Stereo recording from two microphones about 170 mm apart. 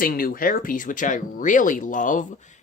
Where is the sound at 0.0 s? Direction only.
55° left (ahead or behind).